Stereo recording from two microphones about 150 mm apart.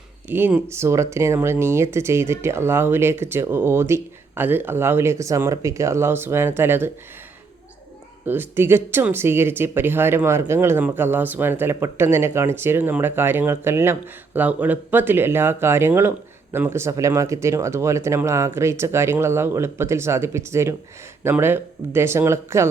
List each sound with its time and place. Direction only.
0.3 s speech: 15° right (ahead or behind)
8.2 s speech: 15° right (ahead or behind)